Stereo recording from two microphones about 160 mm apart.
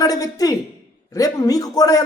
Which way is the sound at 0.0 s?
20° left (ahead or behind).